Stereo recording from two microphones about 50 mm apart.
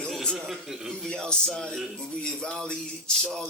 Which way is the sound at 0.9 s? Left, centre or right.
Centre.